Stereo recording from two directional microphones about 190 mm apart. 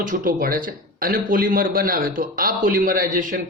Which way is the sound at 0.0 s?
45° right (ahead or behind).